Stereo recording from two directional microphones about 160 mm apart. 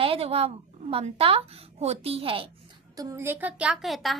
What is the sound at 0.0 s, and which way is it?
A woman's voice, 35° right (ahead or behind).